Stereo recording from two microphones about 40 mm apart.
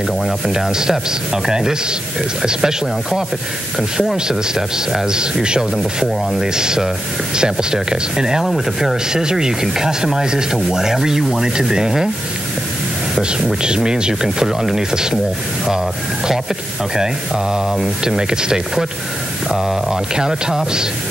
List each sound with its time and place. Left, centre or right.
0.2 s speech: centre
4.3 s speech: centre
13.6 s speech: centre
16.9 s speech: centre
19.5 s speech: centre